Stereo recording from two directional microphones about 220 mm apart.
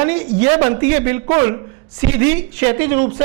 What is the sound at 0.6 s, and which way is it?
Speech, 15° right (ahead or behind).